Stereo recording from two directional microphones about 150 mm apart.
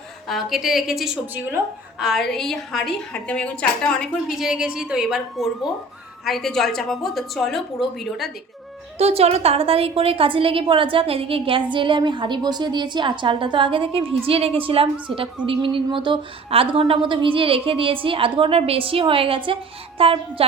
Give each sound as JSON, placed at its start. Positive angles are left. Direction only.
{"t": 0.3, "sound": "a woman's voice", "side_deg": 0}
{"t": 2.0, "sound": "a woman's voice", "side_deg": 0}
{"t": 9.0, "sound": "a woman's voice", "side_deg": -45}